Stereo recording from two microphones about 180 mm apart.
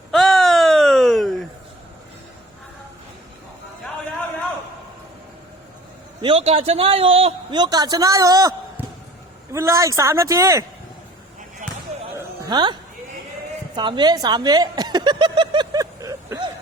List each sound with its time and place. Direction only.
0.1 s a sound: centre (ahead or behind)
6.2 s a man's voice: 35° right (ahead or behind); by 8.5 s 20° right (ahead or behind)
8.8 s basketball bounce: 10° right (ahead or behind)
9.5 s a man's voice: 15° right (ahead or behind)
12.1 s music: 20° right (ahead or behind)
13.7 s chuckle: 25° right (ahead or behind)